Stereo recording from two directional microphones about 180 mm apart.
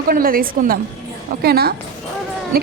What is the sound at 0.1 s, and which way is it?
A woman's voice, 55° right (ahead or behind).